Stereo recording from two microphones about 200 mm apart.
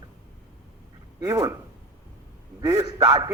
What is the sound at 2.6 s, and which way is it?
Speech, 15° right (ahead or behind).